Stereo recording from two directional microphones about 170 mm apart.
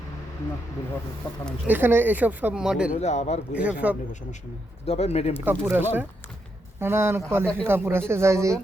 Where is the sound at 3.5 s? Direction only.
10° right (ahead or behind).